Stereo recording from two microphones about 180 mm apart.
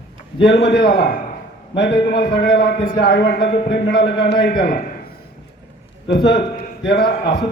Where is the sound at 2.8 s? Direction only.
50° left (ahead or behind).